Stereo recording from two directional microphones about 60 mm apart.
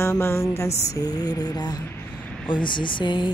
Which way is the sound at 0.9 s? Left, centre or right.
Left.